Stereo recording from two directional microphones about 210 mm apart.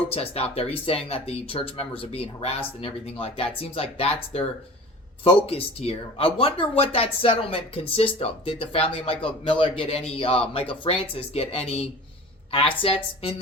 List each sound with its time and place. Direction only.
0.1 s speech: 30° left (ahead or behind)